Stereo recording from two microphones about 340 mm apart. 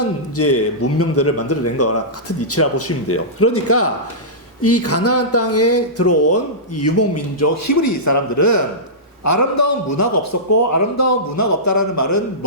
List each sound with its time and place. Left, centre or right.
0.0 s speech: left